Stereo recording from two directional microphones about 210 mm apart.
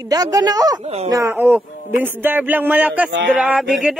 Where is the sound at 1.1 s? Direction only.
10° right (ahead or behind).